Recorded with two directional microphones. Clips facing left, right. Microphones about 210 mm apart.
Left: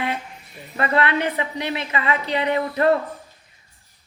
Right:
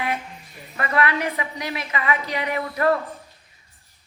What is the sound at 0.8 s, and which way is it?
A woman's voice, 25° left (ahead or behind).